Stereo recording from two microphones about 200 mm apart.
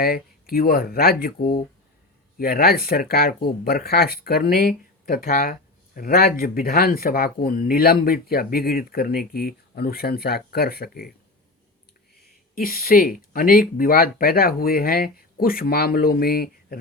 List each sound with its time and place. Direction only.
0.0 s speech: 50° left (ahead or behind)
12.5 s speech: 45° left (ahead or behind)